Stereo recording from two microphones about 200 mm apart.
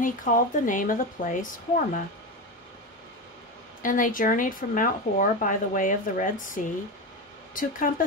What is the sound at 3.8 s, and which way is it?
A woman's voice, 40° left (ahead or behind).